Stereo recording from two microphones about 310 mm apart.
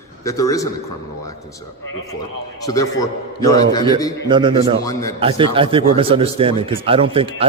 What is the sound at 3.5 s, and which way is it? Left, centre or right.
Speech, centre.